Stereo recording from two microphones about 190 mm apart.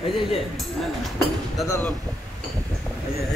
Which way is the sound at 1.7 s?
10° left (ahead or behind).